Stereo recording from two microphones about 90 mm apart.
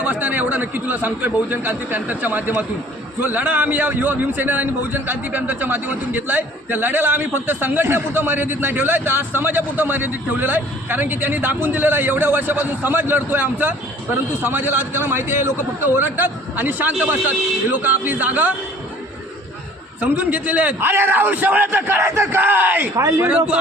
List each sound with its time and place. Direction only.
0.0 s a man's voice: 20° right (ahead or behind)
20.0 s a man's voice: 15° right (ahead or behind)